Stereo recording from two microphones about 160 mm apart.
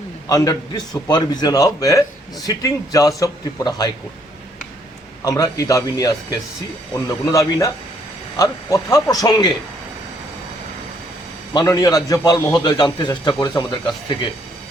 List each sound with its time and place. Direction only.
0.3 s a man's voice: 20° left (ahead or behind)
5.2 s a man's voice: 20° left (ahead or behind)
11.5 s a man's voice: 20° left (ahead or behind)